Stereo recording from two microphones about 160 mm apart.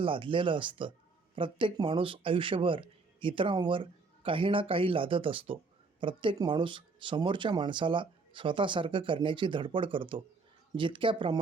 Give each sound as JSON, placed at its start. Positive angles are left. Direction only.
{"t": 0.0, "sound": "speech", "side_deg": -30}